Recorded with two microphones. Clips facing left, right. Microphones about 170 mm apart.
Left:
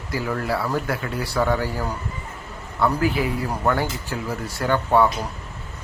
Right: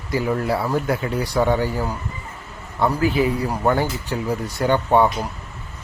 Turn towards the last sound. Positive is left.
turn(degrees=-20)  # may be behind; listen again after turning